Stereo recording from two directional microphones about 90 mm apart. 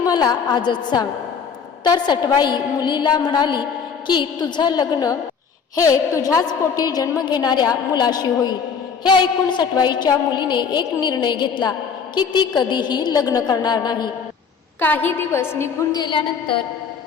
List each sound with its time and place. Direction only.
0.0 s a woman's voice: 45° left (ahead or behind)
5.7 s a woman's voice: 40° left (ahead or behind)
9.6 s a woman's voice: 55° left (ahead or behind)
14.8 s a woman's voice: 20° left (ahead or behind)
15.9 s a woman's voice: 55° left (ahead or behind)